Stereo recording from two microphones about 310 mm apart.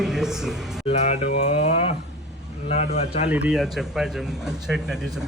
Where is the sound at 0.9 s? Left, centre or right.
Centre.